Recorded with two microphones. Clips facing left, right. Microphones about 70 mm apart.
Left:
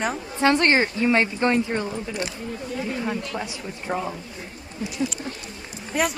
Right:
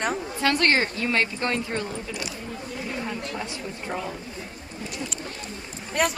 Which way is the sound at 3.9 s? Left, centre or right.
Left.